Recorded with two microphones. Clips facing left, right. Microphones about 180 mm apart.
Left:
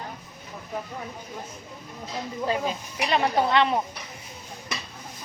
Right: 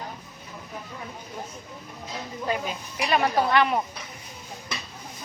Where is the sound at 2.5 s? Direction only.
25° left (ahead or behind).